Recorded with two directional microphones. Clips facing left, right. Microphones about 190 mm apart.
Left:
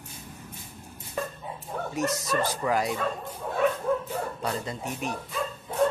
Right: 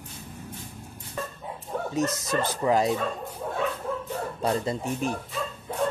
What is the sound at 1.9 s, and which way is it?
Speech, 20° right (ahead or behind).